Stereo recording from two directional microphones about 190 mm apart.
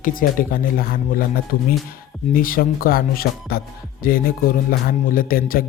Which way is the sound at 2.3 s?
50° left (ahead or behind).